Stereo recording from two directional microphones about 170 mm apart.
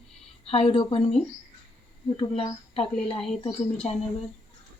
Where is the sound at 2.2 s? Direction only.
35° left (ahead or behind).